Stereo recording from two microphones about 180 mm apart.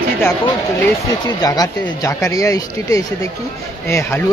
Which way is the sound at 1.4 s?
20° left (ahead or behind).